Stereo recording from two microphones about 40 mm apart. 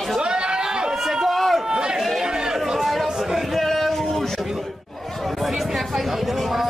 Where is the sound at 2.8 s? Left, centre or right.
Centre.